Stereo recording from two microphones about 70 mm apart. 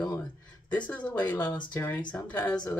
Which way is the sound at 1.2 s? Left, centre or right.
Left.